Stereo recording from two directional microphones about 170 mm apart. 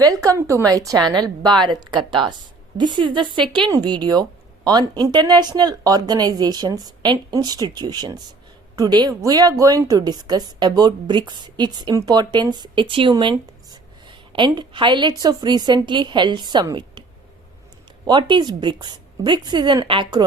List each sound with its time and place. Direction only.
0.0 s a woman's voice: 20° right (ahead or behind)
18.0 s a woman's voice: 25° right (ahead or behind)